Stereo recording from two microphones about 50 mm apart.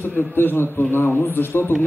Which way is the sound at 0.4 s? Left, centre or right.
Left.